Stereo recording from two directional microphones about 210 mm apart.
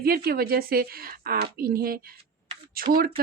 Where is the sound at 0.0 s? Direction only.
45° right (ahead or behind).